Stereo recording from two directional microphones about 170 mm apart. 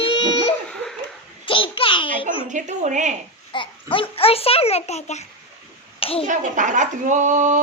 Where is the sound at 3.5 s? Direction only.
30° left (ahead or behind).